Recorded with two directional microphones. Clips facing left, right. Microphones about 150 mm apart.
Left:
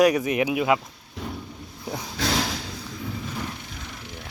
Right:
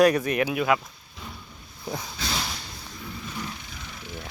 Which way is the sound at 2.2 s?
85° left.